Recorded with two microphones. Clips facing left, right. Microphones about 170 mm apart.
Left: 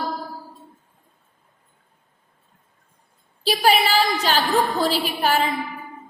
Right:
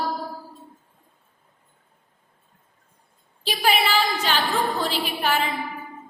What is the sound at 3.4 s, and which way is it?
A woman's voice, 35° left (ahead or behind).